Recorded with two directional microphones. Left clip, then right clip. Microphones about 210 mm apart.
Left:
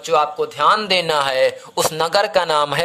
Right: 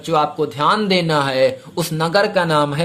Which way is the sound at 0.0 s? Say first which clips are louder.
Even; 15° left (ahead or behind).